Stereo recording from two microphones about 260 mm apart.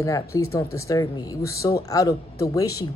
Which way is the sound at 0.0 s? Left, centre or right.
Centre.